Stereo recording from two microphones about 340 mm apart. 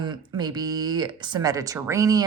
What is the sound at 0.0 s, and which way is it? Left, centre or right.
Speech, centre.